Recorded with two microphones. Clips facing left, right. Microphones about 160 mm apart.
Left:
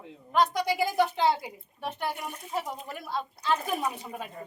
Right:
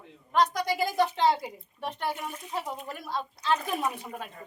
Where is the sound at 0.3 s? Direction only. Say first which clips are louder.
Even; 10° left (ahead or behind).